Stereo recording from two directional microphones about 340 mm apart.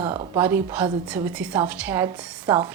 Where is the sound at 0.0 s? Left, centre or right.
Centre.